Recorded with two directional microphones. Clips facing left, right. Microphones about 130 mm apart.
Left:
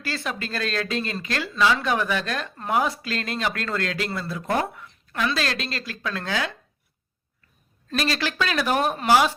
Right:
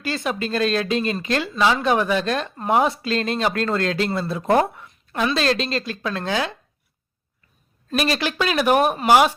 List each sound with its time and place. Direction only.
0.0 s speech: 20° right (ahead or behind)
7.9 s a woman's voice: 15° right (ahead or behind)